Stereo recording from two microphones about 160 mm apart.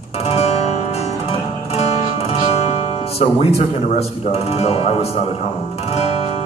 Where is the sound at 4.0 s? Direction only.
40° left (ahead or behind).